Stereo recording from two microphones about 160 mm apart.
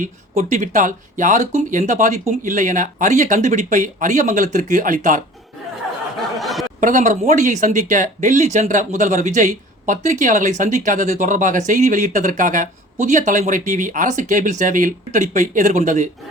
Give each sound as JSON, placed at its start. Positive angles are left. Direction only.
{"t": 0.5, "sound": "speech", "side_deg": -55}
{"t": 6.4, "sound": "a sound", "side_deg": 0}
{"t": 6.7, "sound": "speech", "side_deg": -55}